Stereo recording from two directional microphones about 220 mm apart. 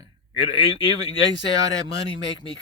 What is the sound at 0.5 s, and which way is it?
Speech, 15° right (ahead or behind).